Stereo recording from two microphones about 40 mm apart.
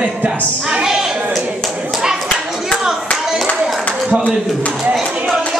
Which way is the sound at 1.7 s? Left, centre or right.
Centre.